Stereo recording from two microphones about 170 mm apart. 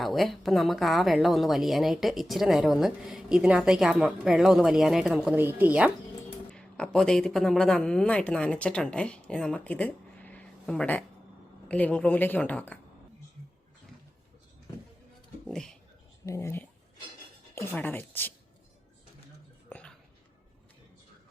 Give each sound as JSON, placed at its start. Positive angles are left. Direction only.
{"t": 0.0, "sound": "a woman's voice", "side_deg": 0}
{"t": 6.5, "sound": "a woman's voice", "side_deg": 5}
{"t": 15.4, "sound": "speech", "side_deg": 5}
{"t": 16.2, "sound": "a woman's voice", "side_deg": 15}
{"t": 19.7, "sound": "a sound", "side_deg": 5}